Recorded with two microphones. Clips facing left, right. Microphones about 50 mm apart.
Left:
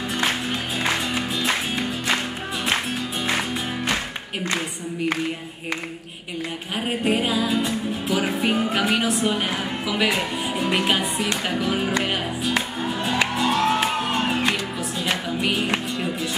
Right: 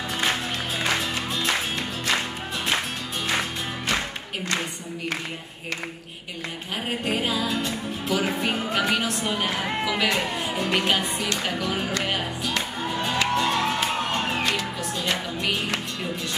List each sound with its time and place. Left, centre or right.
1.4 s music: centre
7.1 s music: centre
11.4 s speech: centre
11.9 s music: centre